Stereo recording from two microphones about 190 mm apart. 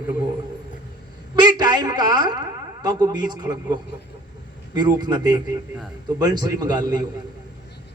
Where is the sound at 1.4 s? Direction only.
20° right (ahead or behind).